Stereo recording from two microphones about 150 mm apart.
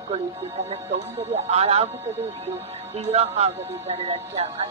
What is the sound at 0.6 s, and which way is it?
Speech, 45° right (ahead or behind).